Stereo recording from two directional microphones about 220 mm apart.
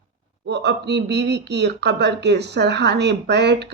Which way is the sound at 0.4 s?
50° right (ahead or behind).